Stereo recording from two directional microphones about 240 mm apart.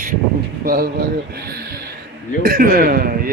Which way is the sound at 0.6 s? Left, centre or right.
Right.